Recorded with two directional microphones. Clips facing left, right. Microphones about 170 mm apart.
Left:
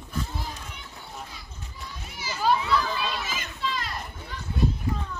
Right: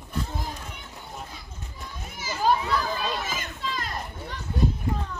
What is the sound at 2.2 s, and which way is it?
Children playing, 45° right (ahead or behind).